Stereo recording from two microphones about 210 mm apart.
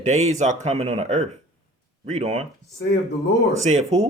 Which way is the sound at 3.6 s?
30° right (ahead or behind).